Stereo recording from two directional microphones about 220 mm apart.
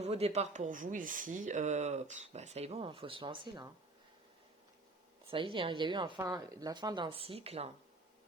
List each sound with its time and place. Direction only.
0.0 s speech: 30° right (ahead or behind)
5.3 s speech: 25° right (ahead or behind)